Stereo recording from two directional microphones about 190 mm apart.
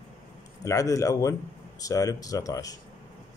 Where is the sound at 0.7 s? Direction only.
15° left (ahead or behind).